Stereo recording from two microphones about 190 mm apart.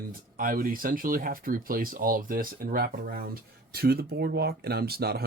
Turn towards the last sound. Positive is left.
turn(degrees=-55)  # may be behind; listen again after turning